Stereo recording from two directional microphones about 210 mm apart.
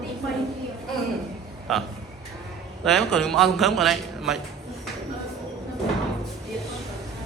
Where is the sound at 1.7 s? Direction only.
Centre (ahead or behind).